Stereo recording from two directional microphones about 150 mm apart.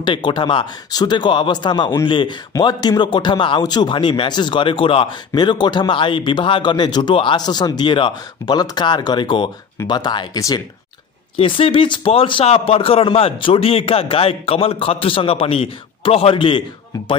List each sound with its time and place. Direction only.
0.0 s speech: 30° left (ahead or behind)
11.3 s speech: 35° left (ahead or behind)